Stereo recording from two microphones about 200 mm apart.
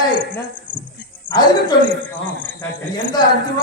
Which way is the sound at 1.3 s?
40° left (ahead or behind).